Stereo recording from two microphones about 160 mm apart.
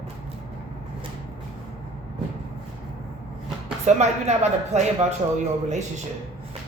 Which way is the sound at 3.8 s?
45° right (ahead or behind).